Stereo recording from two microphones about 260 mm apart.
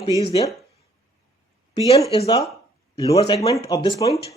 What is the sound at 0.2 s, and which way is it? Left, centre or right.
Speech, left.